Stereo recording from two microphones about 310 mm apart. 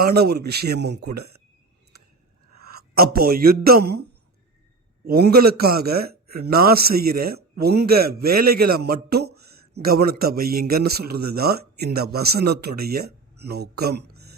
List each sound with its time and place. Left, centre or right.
0.0 s a man's voice: right
1.0 s speech: right
2.6 s speech: right
5.3 s a man's voice: right
6.0 s a sound: right
6.5 s a man's voice: right
11.0 s speech: right
11.3 s speech: right
12.8 s a sound: right
13.5 s speech: right